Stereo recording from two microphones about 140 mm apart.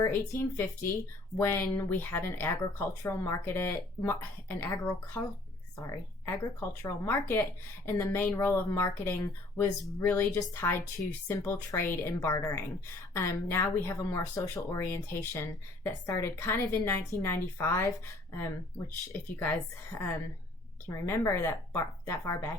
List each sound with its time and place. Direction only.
0.0 s speech: 15° left (ahead or behind)
5.8 s speech: 20° left (ahead or behind)
19.4 s speech: 15° left (ahead or behind)